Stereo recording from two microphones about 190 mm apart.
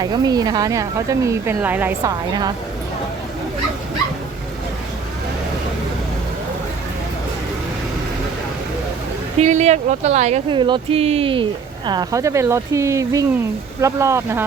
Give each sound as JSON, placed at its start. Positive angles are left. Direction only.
{"t": 0.0, "sound": "speech", "side_deg": -20}
{"t": 9.4, "sound": "speech", "side_deg": -35}